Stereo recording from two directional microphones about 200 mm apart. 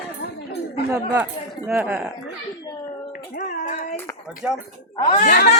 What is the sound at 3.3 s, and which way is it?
Child singing, 40° left (ahead or behind).